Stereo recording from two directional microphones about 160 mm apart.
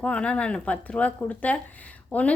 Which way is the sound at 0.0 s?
5° left (ahead or behind).